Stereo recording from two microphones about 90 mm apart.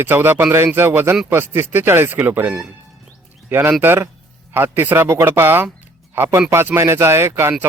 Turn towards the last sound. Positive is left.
turn(degrees=-30)  # may be behind; listen again after turning